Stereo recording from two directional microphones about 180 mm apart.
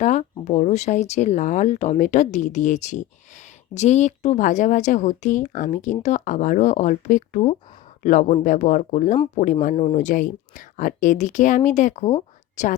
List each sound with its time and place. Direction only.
0.0 s speech: 40° left (ahead or behind)